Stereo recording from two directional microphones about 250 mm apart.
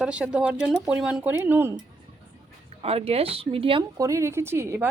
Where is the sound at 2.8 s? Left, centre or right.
Right.